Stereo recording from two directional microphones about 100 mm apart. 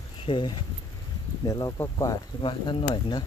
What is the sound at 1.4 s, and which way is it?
Speech, 40° left (ahead or behind).